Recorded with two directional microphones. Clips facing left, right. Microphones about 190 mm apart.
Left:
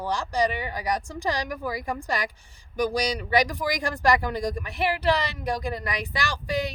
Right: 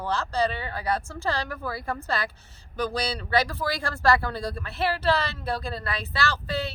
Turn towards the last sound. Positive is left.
turn(degrees=15)  # may be behind; listen again after turning